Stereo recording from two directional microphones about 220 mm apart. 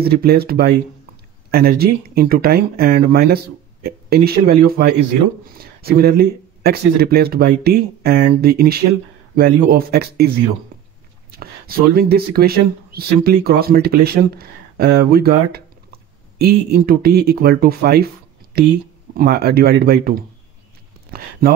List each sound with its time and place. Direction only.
0.0 s speech: 45° right (ahead or behind)
11.3 s speech: 45° right (ahead or behind)